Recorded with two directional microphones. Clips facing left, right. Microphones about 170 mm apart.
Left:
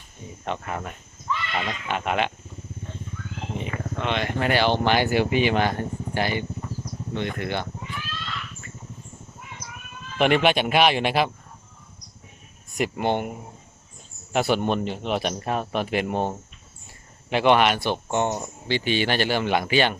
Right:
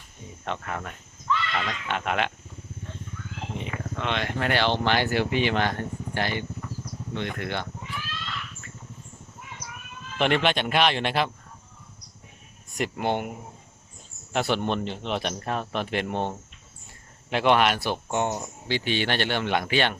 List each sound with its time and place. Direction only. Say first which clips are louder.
0.4 s speech: left 2 dB; 5° left (ahead or behind)
0.8 s a sound: left 2 dB; 20° left (ahead or behind)
1.9 s speech: left 2 dB; 5° left (ahead or behind)
3.7 s speech: left 2 dB; centre (ahead or behind)
10.2 s speech: left 4 dB; 10° left (ahead or behind)
13.0 s speech: left 2 dB; 5° right (ahead or behind)
14.3 s speech: left 3 dB; 10° left (ahead or behind)
17.2 s speech: left 2 dB; centre (ahead or behind)